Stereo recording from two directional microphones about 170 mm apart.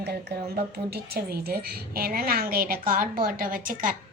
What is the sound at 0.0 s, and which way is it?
Speech, 65° right (ahead or behind).